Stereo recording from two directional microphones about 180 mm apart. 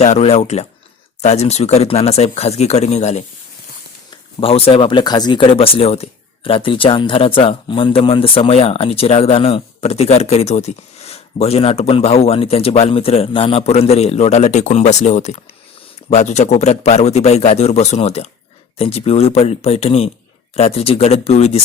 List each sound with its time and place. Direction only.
0.0 s speech: 35° left (ahead or behind)
4.4 s speech: 30° left (ahead or behind)